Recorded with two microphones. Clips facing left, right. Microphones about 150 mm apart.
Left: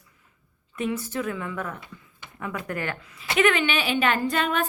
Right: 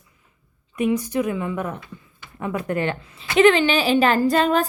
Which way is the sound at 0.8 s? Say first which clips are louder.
Right 7 dB; 15° right (ahead or behind).